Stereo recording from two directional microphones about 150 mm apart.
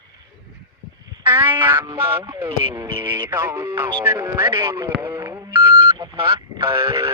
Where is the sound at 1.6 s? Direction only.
15° right (ahead or behind).